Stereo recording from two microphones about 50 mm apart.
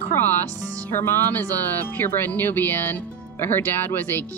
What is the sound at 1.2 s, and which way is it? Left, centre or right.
Speech, left.